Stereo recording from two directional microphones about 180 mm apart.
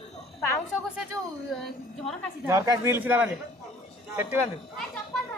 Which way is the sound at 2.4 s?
20° right (ahead or behind).